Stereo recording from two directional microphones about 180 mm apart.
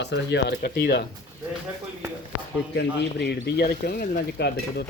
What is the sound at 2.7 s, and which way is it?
Speech, 65° left (ahead or behind).